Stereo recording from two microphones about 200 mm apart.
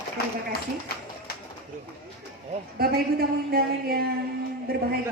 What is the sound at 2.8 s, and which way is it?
Speech, 50° right (ahead or behind).